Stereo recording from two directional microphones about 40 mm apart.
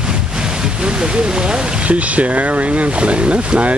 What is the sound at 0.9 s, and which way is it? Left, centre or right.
Speech, right.